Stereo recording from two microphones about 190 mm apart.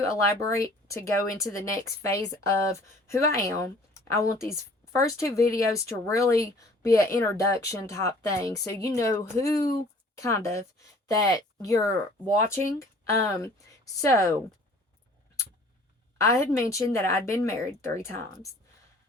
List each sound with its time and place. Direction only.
0.0 s speech: 15° left (ahead or behind)
16.1 s speech: 15° left (ahead or behind)